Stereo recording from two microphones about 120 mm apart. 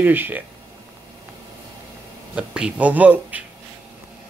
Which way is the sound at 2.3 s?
10° right (ahead or behind).